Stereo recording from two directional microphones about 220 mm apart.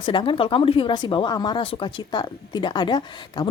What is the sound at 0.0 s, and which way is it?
Speech, 20° left (ahead or behind).